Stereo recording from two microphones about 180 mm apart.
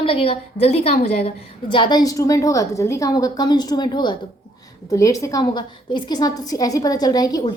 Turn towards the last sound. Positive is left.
turn(degrees=20)  # may be behind; listen again after turning